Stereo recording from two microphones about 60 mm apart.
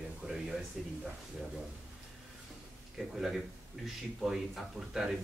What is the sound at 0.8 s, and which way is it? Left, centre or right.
Speech, centre.